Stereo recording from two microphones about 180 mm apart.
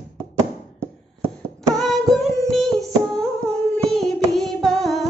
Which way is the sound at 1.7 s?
Centre (ahead or behind).